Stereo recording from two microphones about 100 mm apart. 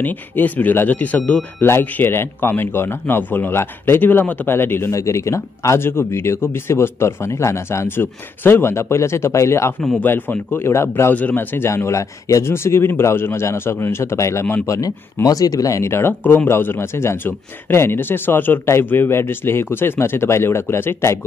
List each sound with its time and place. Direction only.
0.0 s a man's voice: 15° left (ahead or behind)
14.8 s a man's voice: 35° left (ahead or behind)